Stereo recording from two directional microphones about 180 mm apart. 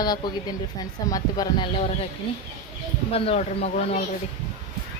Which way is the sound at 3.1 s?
35° left (ahead or behind).